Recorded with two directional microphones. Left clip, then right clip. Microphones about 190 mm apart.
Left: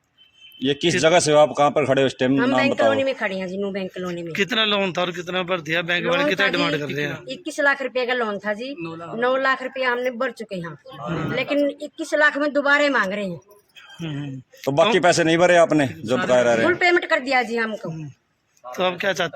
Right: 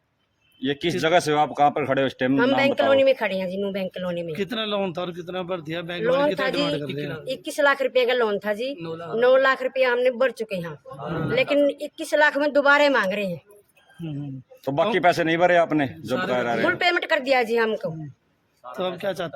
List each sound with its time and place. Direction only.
0.6 s speech: 45° left (ahead or behind)
2.6 s speech: 30° right (ahead or behind)
4.3 s speech: centre (ahead or behind)
7.3 s speech: 25° right (ahead or behind)
8.8 s a woman's voice: 50° right (ahead or behind)
9.1 s speech: 25° right (ahead or behind)
14.6 s speech: 50° left (ahead or behind)
16.6 s speech: 25° right (ahead or behind)
18.7 s speech: centre (ahead or behind)